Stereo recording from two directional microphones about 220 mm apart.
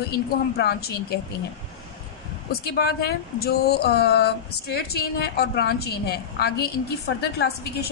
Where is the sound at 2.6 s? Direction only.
45° left (ahead or behind).